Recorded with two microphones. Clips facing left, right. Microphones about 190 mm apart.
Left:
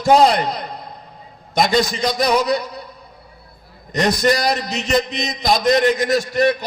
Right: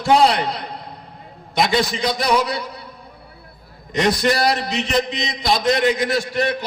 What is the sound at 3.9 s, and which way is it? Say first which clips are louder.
A man's voice: left 1 dB; 40° left (ahead or behind).